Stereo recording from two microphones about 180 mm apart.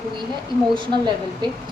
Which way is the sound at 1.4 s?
25° right (ahead or behind).